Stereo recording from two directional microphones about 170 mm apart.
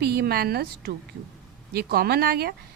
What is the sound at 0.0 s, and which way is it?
Speech, 70° right (ahead or behind).